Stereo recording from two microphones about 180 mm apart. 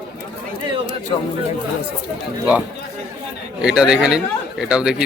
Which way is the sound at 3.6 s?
5° right (ahead or behind).